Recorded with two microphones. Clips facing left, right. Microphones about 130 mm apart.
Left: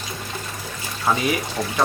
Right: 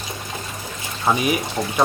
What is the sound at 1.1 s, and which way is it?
Speech, 15° right (ahead or behind).